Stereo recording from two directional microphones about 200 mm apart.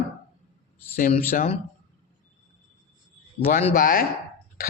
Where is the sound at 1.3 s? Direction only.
40° left (ahead or behind).